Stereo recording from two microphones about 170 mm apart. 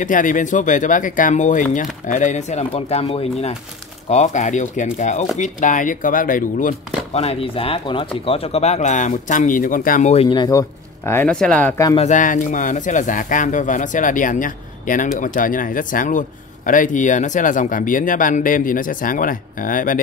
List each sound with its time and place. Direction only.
0.0 s speech: 50° left (ahead or behind)
7.2 s speech: 35° left (ahead or behind)
10.3 s speech: 25° left (ahead or behind)
11.1 s speech: 10° left (ahead or behind)
12.0 s speech: 50° left (ahead or behind)